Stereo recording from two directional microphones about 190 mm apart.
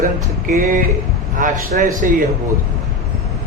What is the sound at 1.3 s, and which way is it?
Speech, 45° right (ahead or behind).